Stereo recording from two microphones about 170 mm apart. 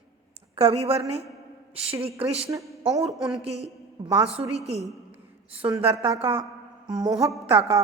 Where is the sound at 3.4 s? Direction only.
35° right (ahead or behind).